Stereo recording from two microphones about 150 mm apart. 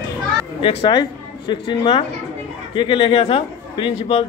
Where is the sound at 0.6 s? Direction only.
35° left (ahead or behind).